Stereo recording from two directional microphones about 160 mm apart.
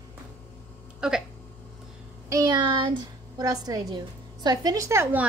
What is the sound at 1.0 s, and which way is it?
Speech, 5° right (ahead or behind).